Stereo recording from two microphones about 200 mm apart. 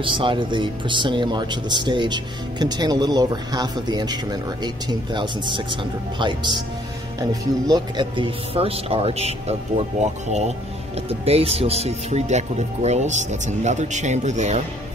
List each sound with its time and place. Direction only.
0.0 s speech: 25° right (ahead or behind)